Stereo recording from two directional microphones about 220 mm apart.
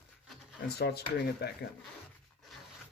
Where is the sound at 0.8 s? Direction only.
45° left (ahead or behind).